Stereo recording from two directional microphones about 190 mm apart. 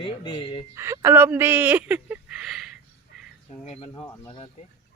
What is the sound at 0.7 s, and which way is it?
Speech, 15° right (ahead or behind).